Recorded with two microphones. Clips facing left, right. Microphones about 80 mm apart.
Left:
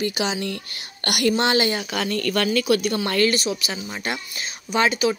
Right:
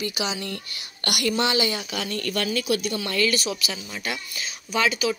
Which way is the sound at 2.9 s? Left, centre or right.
Left.